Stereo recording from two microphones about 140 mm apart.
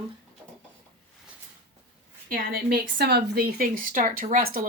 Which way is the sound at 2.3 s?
90° right.